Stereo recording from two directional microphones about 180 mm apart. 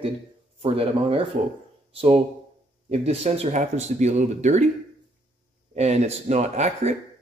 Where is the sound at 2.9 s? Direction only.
35° right (ahead or behind).